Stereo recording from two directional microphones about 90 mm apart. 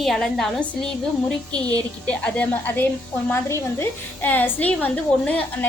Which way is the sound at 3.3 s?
30° left (ahead or behind).